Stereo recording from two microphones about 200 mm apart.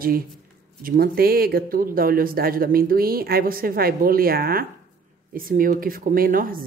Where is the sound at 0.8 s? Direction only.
50° right (ahead or behind).